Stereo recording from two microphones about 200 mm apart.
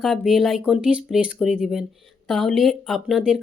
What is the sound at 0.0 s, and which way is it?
Speech, centre (ahead or behind).